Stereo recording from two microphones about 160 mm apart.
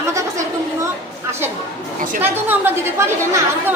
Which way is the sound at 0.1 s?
20° right (ahead or behind).